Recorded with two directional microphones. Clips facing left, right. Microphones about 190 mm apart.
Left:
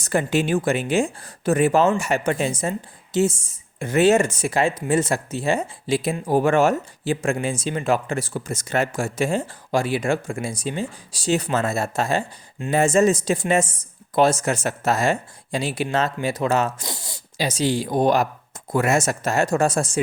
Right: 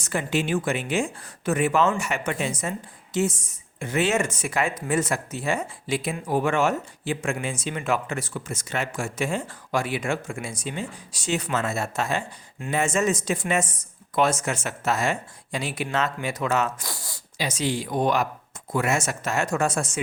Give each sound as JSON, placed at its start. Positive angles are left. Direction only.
{"t": 0.0, "sound": "speech", "side_deg": 40}
{"t": 3.8, "sound": "speech", "side_deg": 40}
{"t": 17.3, "sound": "speech", "side_deg": 35}